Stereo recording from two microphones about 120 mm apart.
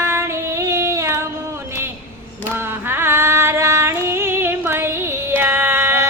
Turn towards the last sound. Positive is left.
turn(degrees=-20)  # may be behind; listen again after turning